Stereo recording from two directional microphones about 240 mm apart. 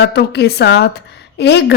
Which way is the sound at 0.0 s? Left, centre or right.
Left.